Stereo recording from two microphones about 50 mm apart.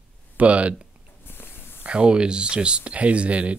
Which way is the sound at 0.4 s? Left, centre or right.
Right.